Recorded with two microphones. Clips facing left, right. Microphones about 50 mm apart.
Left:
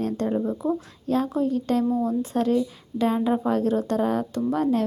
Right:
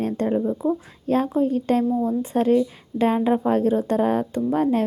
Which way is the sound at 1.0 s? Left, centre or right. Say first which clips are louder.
Right 3 dB; right.